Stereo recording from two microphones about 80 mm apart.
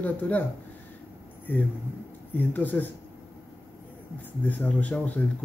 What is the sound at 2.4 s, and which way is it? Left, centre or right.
Speech, left.